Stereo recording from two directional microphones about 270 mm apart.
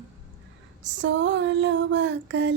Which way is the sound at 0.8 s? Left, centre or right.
Right.